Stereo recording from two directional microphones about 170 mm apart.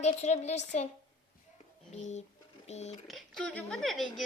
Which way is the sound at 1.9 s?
40° left (ahead or behind).